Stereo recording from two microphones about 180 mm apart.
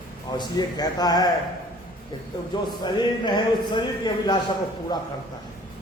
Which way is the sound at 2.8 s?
25° left (ahead or behind).